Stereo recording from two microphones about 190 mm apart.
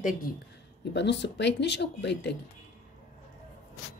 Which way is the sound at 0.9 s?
65° left (ahead or behind).